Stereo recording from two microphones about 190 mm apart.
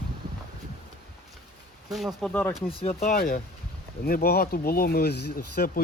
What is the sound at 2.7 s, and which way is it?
Speech, 30° left (ahead or behind).